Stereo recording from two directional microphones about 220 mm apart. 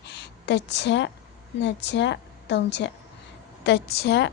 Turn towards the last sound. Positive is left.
turn(degrees=50)  # may be behind; listen again after turning